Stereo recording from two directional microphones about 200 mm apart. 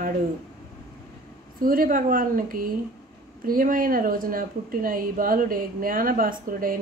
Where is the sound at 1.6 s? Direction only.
45° right (ahead or behind).